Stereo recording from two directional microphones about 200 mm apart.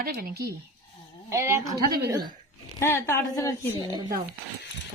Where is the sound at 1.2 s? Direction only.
15° right (ahead or behind).